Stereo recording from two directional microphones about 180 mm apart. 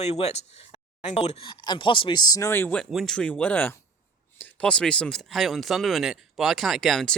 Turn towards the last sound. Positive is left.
turn(degrees=0)  # may be behind; listen again after turning